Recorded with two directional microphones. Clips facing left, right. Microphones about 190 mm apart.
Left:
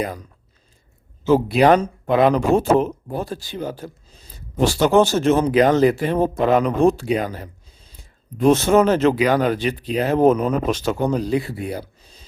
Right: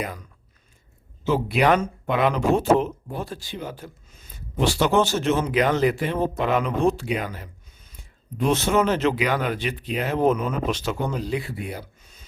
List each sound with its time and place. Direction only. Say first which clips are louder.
1.2 s speech: left 6 dB; 40° left (ahead or behind)
8.4 s speech: left 6 dB; 45° left (ahead or behind)